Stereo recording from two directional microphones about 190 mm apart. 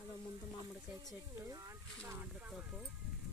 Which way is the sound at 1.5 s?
15° right (ahead or behind).